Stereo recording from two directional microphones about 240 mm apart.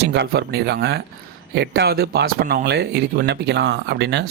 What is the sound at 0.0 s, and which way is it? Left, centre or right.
Speech, right.